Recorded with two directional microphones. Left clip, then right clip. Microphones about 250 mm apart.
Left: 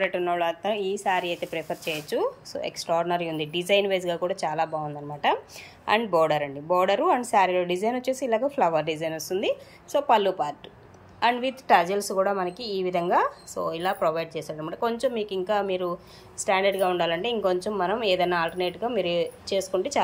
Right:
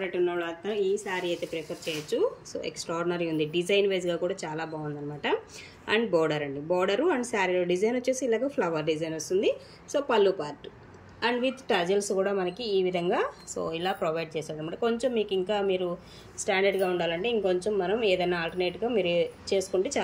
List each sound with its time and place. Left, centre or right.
0.0 s a woman's voice: centre
5.9 s a woman's voice: centre